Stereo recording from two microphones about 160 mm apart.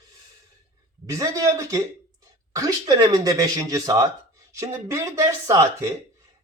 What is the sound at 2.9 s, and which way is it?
A man's voice, 25° right (ahead or behind).